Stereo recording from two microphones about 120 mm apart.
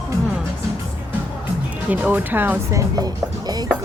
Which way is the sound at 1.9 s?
15° right (ahead or behind).